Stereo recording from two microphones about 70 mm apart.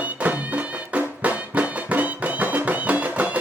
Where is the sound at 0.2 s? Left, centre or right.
Right.